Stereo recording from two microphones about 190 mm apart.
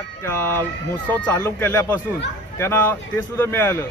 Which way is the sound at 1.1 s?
10° left (ahead or behind).